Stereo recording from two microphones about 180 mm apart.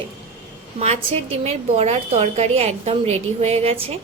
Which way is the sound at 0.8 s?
35° right (ahead or behind).